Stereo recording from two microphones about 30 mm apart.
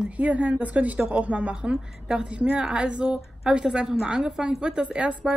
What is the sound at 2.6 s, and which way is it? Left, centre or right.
A woman's voice, right.